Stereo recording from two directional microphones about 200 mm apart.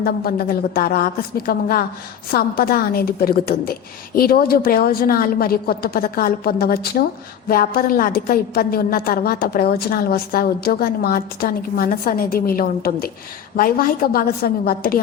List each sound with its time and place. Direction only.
0.0 s a woman's voice: 50° left (ahead or behind)